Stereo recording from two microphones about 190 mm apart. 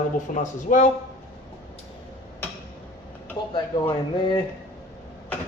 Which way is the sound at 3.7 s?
20° left (ahead or behind).